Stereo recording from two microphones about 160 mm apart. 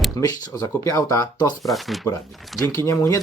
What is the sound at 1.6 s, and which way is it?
Speech, centre (ahead or behind).